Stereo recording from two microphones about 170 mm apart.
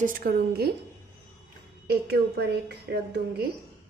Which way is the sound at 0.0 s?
55° right (ahead or behind).